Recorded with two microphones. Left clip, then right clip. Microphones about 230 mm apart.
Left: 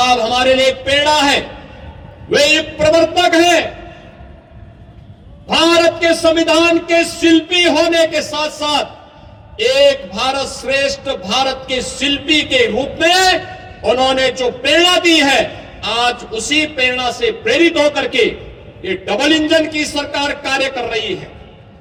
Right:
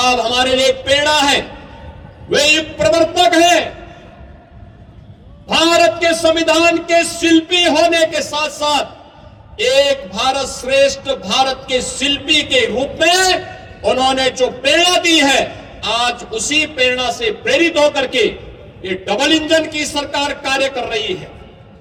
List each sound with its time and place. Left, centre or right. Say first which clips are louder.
0.0 s a man's voice: left 1 dB; right
5.5 s a man's voice: even; right